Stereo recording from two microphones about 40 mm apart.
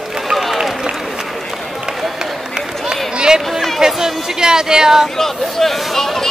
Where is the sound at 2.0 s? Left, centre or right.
Centre.